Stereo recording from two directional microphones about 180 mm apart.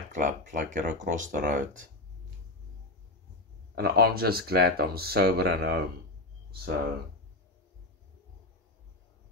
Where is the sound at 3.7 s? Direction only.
60° right (ahead or behind).